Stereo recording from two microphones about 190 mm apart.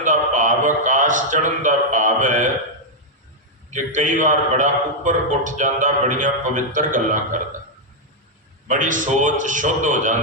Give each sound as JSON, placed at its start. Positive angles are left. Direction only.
{"t": 0.0, "sound": "a sound", "side_deg": -40}
{"t": 3.7, "sound": "a man's voice", "side_deg": -40}
{"t": 8.6, "sound": "a man's voice", "side_deg": -40}